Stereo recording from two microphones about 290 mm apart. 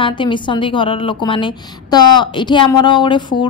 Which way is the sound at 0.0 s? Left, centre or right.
Centre.